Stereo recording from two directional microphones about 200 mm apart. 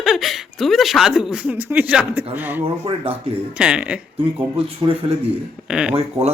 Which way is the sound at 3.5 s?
5° right (ahead or behind).